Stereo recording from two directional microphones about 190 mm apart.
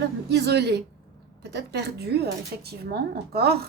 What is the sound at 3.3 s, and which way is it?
Speech, 55° right (ahead or behind).